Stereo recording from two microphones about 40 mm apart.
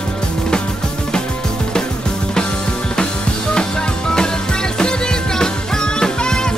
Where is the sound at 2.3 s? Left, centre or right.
Centre.